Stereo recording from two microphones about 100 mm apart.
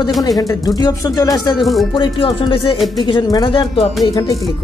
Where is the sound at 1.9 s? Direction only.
60° left (ahead or behind).